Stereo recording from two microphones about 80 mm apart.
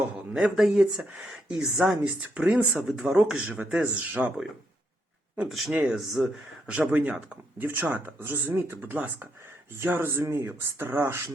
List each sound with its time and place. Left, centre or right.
0.0 s a sound: centre
0.5 s speech: centre
2.2 s speech: centre
5.5 s speech: centre
5.7 s speech: centre; by 11.2 s right